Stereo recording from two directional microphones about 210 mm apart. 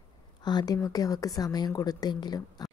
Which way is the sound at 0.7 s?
15° left (ahead or behind).